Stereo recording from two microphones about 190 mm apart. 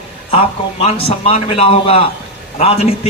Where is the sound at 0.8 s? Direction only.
30° left (ahead or behind).